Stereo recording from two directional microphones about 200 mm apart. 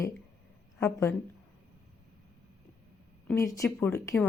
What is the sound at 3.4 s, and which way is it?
Speech, 15° left (ahead or behind).